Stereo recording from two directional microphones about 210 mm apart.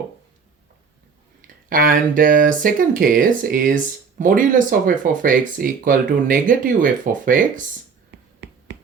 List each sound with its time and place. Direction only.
1.7 s speech: 40° right (ahead or behind)